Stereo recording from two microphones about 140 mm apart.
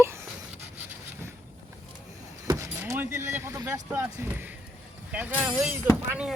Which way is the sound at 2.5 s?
20° right (ahead or behind).